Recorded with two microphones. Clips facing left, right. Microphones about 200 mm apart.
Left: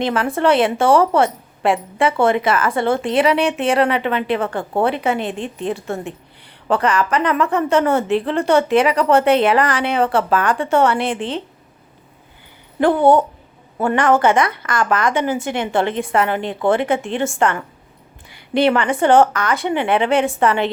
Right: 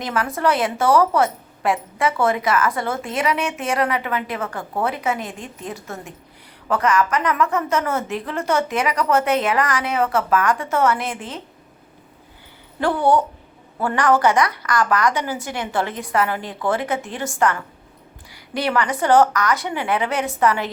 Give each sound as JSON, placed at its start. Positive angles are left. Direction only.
{"t": 0.0, "sound": "a woman's voice", "side_deg": 30}
{"t": 12.8, "sound": "a woman's voice", "side_deg": 20}